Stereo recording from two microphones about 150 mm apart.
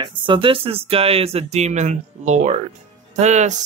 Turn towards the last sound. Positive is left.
turn(degrees=-50)  # may be behind; listen again after turning